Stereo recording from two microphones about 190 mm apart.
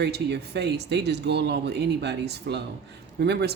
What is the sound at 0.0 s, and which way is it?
Speech, 60° right (ahead or behind).